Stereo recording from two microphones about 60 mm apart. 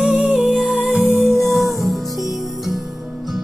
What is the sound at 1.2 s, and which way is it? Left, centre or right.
Music, centre.